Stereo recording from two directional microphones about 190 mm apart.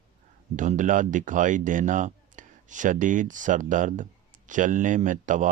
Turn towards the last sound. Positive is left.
turn(degrees=-40)  # may be behind; listen again after turning